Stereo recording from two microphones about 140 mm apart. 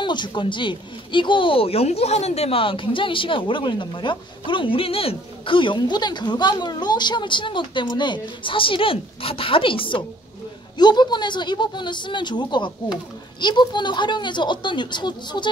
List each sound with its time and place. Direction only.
0.0 s speech: 35° left (ahead or behind)